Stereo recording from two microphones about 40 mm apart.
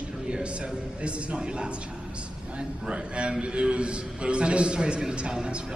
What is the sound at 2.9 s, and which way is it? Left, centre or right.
A man's voice, right.